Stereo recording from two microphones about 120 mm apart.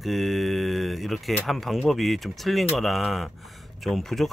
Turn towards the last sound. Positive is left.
turn(degrees=0)  # may be behind; listen again after turning